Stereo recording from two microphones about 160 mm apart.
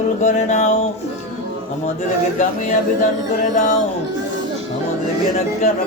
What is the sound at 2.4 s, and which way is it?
Speech, 50° left (ahead or behind).